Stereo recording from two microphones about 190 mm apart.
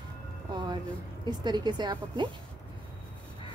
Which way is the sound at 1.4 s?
20° right (ahead or behind).